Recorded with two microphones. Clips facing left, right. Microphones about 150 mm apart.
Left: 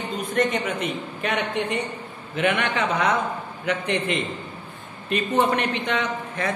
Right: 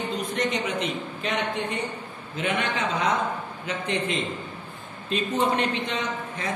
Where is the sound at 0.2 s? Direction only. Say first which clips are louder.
Left 7 dB; 55° left (ahead or behind).